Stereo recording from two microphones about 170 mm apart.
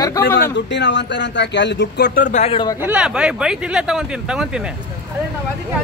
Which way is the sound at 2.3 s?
40° left (ahead or behind).